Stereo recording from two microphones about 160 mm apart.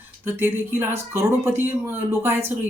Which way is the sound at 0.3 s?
15° right (ahead or behind).